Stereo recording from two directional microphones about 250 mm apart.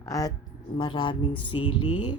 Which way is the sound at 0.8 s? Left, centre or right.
Centre.